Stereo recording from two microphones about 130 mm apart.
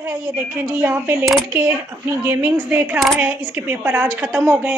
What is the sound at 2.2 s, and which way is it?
A woman's voice, 20° right (ahead or behind).